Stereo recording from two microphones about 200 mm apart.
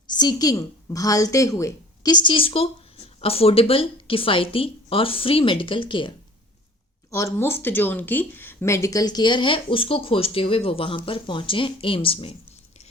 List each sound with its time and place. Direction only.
0.1 s speech: 20° left (ahead or behind)
7.1 s speech: 15° left (ahead or behind)